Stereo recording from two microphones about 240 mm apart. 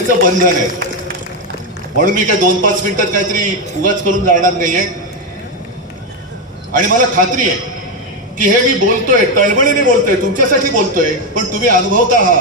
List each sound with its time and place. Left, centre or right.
0.2 s a man's voice: right
2.0 s a man's voice: right
6.8 s a man's voice: right